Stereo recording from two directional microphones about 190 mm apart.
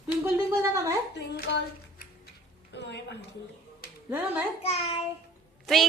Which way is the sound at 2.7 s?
65° left (ahead or behind).